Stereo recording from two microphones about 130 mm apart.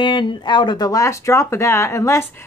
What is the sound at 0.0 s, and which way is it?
A woman's voice, 40° left (ahead or behind).